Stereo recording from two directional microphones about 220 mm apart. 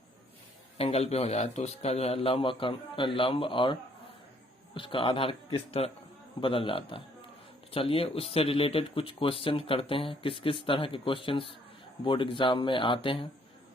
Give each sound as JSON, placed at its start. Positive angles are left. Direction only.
{"t": 0.8, "sound": "speech", "side_deg": 30}